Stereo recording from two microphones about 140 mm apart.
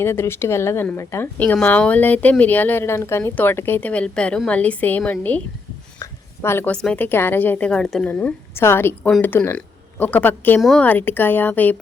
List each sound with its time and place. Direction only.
0.0 s a woman's voice: 15° left (ahead or behind)
10.6 s speech: centre (ahead or behind)
10.8 s speech: 15° left (ahead or behind)